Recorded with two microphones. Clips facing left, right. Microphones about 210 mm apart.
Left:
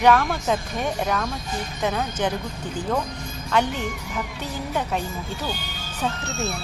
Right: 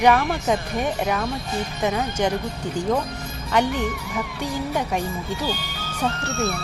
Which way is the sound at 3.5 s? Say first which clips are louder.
Right 2 dB; 10° right (ahead or behind).